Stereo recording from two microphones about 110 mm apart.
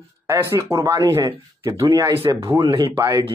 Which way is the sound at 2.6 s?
45° right (ahead or behind).